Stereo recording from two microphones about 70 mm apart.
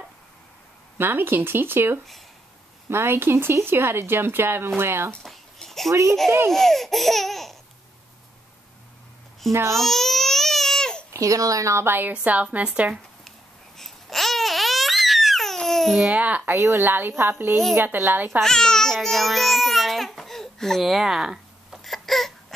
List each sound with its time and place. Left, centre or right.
0.9 s speech: right
5.2 s a sound: centre
5.9 s a child's voice: right
6.5 s laughter: centre
9.5 s speech: right
9.8 s babbling: centre
11.1 s a child's voice: right
11.9 s a woman's voice: right
13.7 s babbling: centre
16.1 s a woman's voice: right
16.5 s a woman's voice: right
18.4 s speech: centre
18.9 s babbling: centre